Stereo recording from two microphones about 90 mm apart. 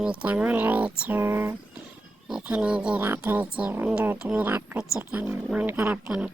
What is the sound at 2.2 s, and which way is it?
Speech, 10° right (ahead or behind).